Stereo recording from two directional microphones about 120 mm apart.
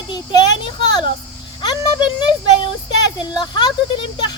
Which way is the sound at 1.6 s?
35° left (ahead or behind).